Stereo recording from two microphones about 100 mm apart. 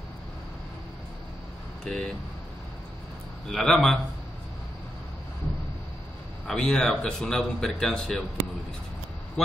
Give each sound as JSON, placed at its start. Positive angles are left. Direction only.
{"t": 1.9, "sound": "a man's voice", "side_deg": 5}
{"t": 3.4, "sound": "a man's voice", "side_deg": 5}
{"t": 6.4, "sound": "a man's voice", "side_deg": 5}